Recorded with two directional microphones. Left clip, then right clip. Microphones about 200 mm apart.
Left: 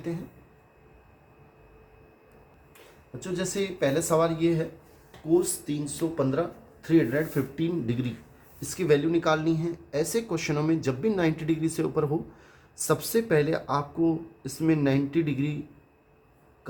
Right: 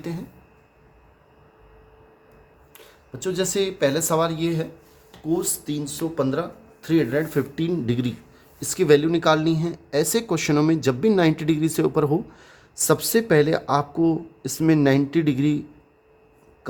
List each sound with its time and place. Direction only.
3.2 s speech: 45° right (ahead or behind)